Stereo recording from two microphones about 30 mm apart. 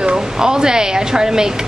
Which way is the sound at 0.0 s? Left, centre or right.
Right.